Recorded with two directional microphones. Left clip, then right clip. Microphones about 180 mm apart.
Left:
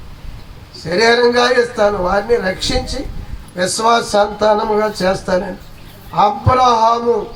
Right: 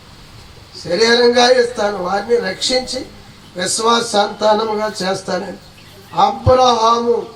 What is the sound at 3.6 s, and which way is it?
Speech, 25° right (ahead or behind).